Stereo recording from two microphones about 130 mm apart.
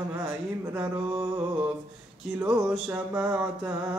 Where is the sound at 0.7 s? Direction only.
20° right (ahead or behind).